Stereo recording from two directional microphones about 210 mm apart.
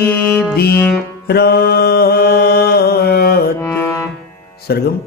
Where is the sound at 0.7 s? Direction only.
10° left (ahead or behind).